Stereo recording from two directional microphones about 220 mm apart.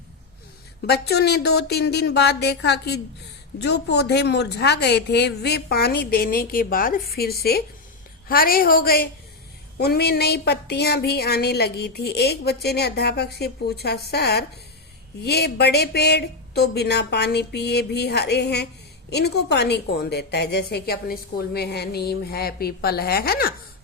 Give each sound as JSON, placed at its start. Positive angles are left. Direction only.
{"t": 0.9, "sound": "a woman's voice", "side_deg": 45}